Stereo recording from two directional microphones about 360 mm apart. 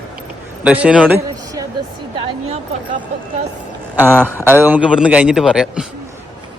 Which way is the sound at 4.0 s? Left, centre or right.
Centre.